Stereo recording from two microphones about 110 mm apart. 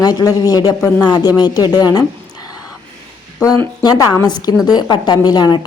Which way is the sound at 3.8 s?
35° left (ahead or behind).